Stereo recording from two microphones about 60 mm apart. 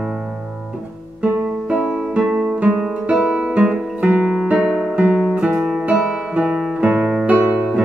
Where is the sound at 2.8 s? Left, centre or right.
Centre.